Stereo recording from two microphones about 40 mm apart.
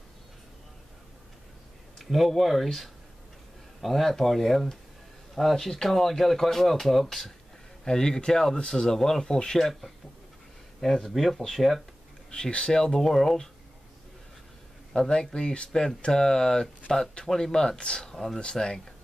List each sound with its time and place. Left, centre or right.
2.0 s speech: centre
12.3 s speech: left; by 13.5 s centre
14.9 s speech: centre